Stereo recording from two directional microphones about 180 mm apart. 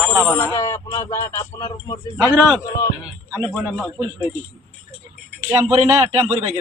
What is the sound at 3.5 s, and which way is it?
Speech, 10° left (ahead or behind).